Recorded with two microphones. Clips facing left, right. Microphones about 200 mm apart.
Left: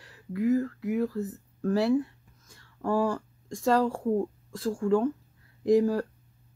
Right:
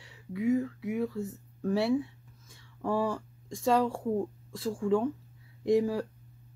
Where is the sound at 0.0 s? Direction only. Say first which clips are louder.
Left 3 dB; centre (ahead or behind).